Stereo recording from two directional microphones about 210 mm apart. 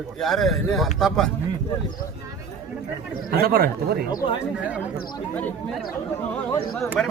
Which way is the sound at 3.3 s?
50° right (ahead or behind).